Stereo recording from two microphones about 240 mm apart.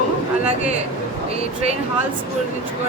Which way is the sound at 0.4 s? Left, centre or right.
Right.